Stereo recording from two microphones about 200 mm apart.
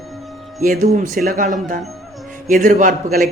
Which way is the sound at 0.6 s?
40° right (ahead or behind).